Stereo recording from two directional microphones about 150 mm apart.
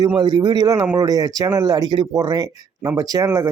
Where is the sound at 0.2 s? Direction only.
30° right (ahead or behind).